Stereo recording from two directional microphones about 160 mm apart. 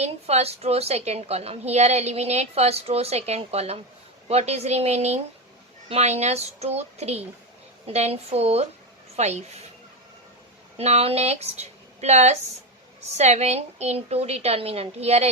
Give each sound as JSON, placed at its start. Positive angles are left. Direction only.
{"t": 0.0, "sound": "a woman's voice", "side_deg": -40}
{"t": 10.8, "sound": "a woman's voice", "side_deg": -40}